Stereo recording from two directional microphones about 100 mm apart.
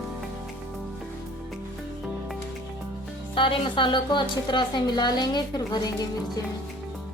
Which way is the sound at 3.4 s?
60° left (ahead or behind).